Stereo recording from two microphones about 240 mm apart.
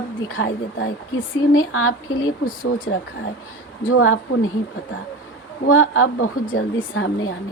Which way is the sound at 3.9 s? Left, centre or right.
Left.